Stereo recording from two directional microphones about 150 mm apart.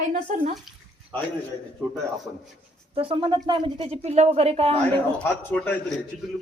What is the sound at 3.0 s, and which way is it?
Speech, 35° right (ahead or behind).